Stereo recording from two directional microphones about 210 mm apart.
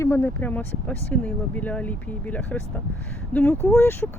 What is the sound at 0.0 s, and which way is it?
Speech, 10° left (ahead or behind).